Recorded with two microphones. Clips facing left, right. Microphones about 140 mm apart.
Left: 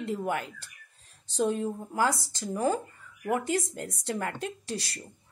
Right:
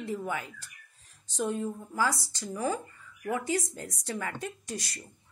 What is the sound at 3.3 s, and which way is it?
Speech, 60° left (ahead or behind).